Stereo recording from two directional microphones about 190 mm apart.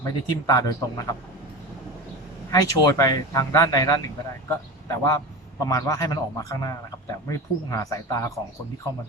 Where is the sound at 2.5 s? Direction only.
20° left (ahead or behind).